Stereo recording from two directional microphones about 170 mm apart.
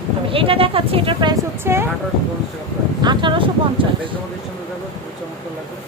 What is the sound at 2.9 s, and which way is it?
Speech, 25° right (ahead or behind).